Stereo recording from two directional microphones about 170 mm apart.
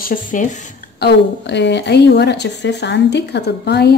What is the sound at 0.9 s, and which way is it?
A woman's voice, 80° left.